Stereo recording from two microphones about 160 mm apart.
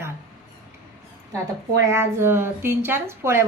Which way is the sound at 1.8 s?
15° right (ahead or behind).